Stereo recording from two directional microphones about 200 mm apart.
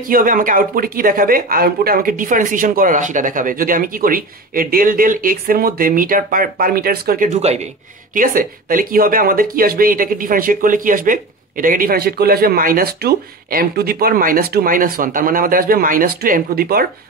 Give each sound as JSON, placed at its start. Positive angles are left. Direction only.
{"t": 0.0, "sound": "speech", "side_deg": -45}
{"t": 7.2, "sound": "speech", "side_deg": -35}